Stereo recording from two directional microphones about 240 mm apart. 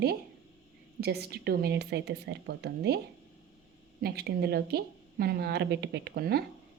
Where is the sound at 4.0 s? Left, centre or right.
Right.